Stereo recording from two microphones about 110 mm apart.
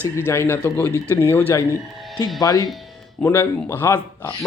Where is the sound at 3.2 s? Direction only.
20° left (ahead or behind).